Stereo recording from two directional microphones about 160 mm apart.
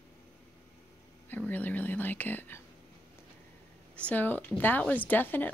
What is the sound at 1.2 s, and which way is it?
Speech, 10° left (ahead or behind).